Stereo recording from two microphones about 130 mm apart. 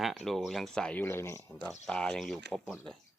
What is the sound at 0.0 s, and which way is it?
Speech, centre (ahead or behind).